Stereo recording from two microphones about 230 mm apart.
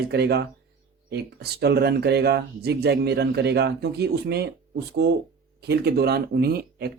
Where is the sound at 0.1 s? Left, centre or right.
Right.